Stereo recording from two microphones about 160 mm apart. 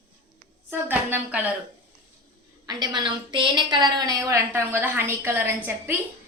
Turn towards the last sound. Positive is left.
turn(degrees=-15)  # may be behind; listen again after turning